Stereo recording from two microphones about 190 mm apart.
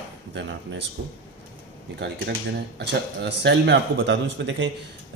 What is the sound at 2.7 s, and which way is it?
Speech, 60° right (ahead or behind).